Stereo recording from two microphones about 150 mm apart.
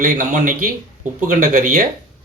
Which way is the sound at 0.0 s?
65° right (ahead or behind).